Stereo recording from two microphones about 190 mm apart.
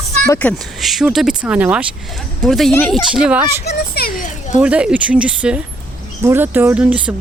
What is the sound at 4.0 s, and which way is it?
Children playing, 50° left (ahead or behind).